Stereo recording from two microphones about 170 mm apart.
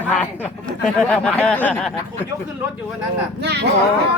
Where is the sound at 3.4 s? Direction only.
75° right (ahead or behind).